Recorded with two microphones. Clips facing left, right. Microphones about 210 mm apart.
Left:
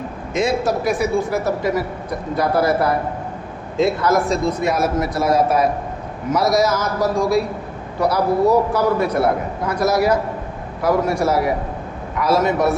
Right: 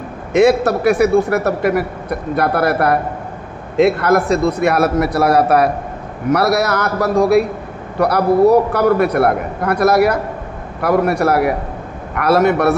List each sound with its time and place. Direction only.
0.3 s a man's voice: 65° right (ahead or behind)